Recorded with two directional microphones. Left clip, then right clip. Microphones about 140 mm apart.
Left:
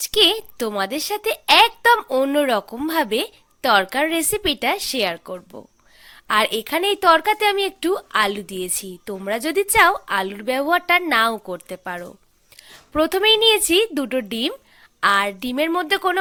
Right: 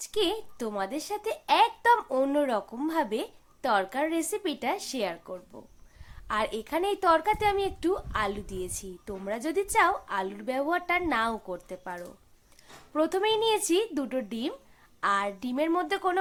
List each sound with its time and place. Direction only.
0.1 s a woman's voice: 40° left (ahead or behind)
6.1 s a woman's voice: 35° left (ahead or behind)